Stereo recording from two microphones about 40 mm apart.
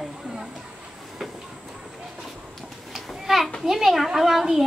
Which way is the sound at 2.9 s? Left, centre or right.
Centre.